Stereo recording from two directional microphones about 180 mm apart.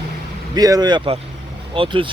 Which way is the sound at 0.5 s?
20° right (ahead or behind).